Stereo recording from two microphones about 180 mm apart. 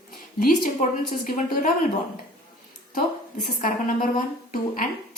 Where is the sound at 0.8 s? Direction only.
45° left (ahead or behind).